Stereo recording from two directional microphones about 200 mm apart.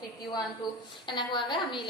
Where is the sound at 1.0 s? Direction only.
25° left (ahead or behind).